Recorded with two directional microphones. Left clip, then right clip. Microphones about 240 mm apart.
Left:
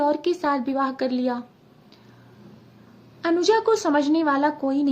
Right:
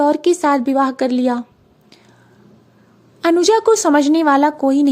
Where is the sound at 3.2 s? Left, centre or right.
Right.